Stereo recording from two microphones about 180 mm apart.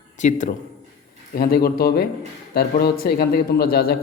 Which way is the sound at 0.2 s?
45° left (ahead or behind).